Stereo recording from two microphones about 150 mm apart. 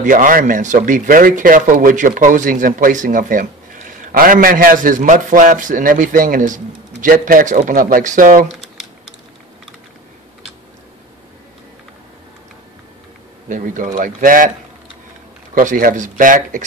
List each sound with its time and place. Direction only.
0.0 s a man's voice: 65° right (ahead or behind)
13.5 s a man's voice: 60° right (ahead or behind)
15.5 s a man's voice: 70° right (ahead or behind)